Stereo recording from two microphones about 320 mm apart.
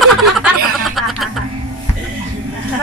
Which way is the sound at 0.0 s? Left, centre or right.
Centre.